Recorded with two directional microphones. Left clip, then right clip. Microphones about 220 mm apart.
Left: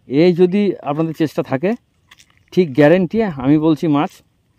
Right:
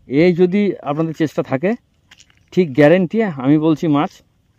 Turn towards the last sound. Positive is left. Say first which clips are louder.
# even
turn(degrees=-5)  # may be behind; listen again after turning